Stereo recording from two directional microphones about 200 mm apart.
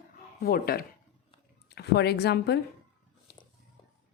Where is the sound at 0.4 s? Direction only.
50° left (ahead or behind).